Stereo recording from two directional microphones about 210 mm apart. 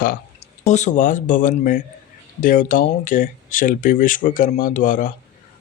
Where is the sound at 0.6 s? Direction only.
35° left (ahead or behind).